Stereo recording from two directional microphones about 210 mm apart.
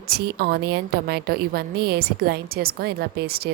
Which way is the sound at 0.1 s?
50° right (ahead or behind).